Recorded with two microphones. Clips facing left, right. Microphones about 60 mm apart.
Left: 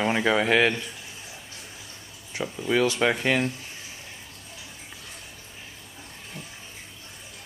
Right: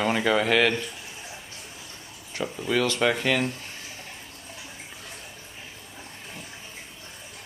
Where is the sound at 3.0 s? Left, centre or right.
Left.